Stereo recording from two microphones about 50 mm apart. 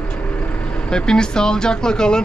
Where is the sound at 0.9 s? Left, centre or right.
Centre.